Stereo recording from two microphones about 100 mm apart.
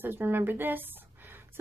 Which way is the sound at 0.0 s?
20° right (ahead or behind).